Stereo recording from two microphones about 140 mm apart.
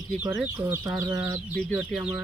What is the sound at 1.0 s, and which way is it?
Speech, 20° right (ahead or behind).